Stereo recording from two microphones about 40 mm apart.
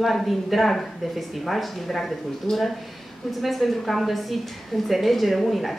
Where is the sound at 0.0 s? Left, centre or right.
Centre.